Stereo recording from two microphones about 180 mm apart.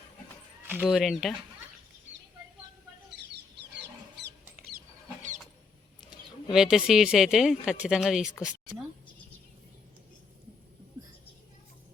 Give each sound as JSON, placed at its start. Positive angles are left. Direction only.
{"t": 0.9, "sound": "speech", "side_deg": 0}
{"t": 6.1, "sound": "speech", "side_deg": -5}
{"t": 11.0, "sound": "a sound", "side_deg": -20}